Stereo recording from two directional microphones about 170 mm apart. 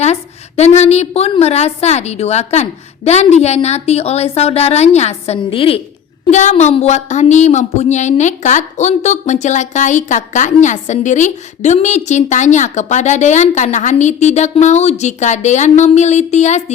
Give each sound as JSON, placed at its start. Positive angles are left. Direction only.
{"t": 0.0, "sound": "a woman's voice", "side_deg": 40}
{"t": 6.3, "sound": "a woman's voice", "side_deg": 45}